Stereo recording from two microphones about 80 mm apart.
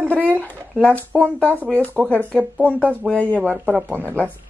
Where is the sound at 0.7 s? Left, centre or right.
Centre.